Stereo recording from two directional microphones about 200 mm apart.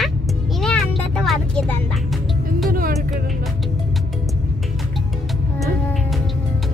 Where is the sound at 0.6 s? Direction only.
5° left (ahead or behind).